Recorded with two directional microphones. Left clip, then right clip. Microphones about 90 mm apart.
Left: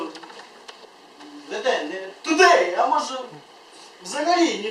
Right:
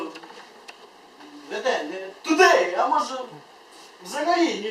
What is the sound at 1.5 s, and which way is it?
A woman's voice, 10° left (ahead or behind).